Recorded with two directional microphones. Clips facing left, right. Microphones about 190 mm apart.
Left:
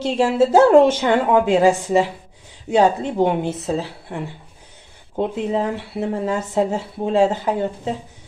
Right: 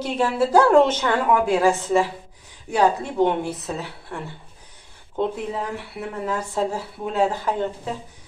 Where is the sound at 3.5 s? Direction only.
30° left (ahead or behind).